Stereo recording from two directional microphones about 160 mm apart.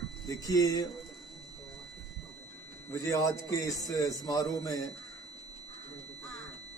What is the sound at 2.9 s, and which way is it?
Speech, 20° left (ahead or behind).